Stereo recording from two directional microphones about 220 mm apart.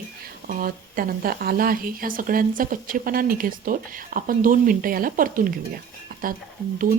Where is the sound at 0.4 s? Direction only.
40° right (ahead or behind).